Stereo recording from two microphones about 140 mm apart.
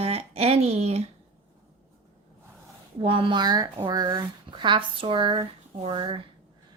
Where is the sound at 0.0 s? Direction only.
45° right (ahead or behind).